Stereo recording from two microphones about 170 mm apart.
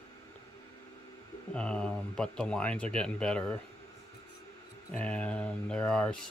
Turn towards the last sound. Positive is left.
turn(degrees=5)  # may be behind; listen again after turning